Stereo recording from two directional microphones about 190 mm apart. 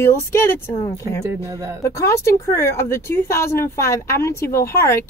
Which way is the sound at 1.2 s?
15° right (ahead or behind).